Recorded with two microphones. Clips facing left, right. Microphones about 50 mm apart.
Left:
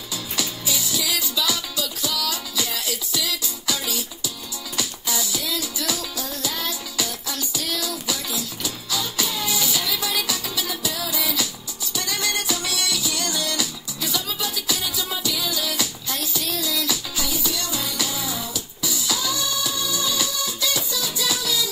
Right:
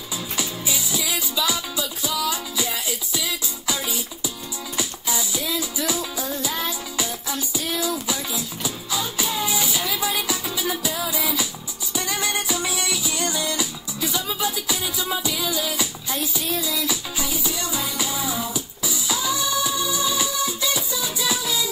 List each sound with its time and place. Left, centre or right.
0.9 s music: centre